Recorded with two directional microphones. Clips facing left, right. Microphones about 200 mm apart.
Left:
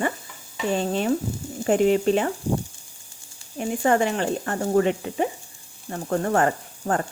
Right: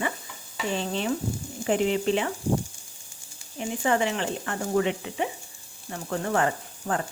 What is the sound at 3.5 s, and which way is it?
A woman's voice, 45° left (ahead or behind).